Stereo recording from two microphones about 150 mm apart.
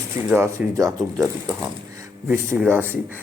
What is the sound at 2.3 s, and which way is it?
Speech, 10° right (ahead or behind).